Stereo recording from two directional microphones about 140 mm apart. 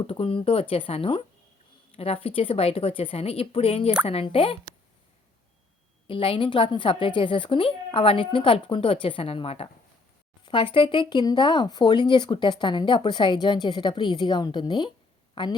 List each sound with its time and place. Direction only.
0.0 s a woman's voice: 40° left (ahead or behind)
6.1 s speech: 40° left (ahead or behind)